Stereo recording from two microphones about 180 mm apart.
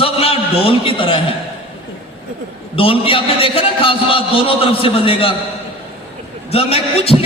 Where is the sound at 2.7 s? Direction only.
30° left (ahead or behind).